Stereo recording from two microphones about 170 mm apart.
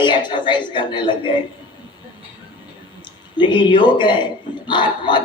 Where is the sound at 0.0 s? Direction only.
25° left (ahead or behind).